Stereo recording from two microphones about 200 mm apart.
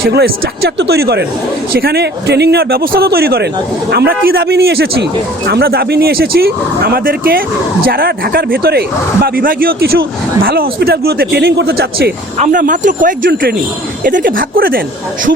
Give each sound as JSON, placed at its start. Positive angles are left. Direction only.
{"t": 0.0, "sound": "speech", "side_deg": -55}